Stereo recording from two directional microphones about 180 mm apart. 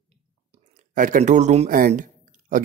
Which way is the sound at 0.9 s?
50° right (ahead or behind).